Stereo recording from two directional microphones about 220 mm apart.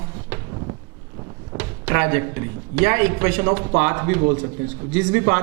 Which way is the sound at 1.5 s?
10° right (ahead or behind).